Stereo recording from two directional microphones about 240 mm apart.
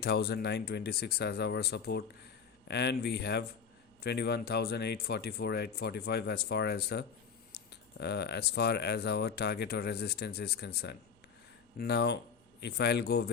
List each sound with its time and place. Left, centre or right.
0.0 s speech: left